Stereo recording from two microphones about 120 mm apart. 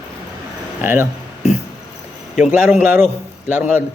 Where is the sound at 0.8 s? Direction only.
20° right (ahead or behind).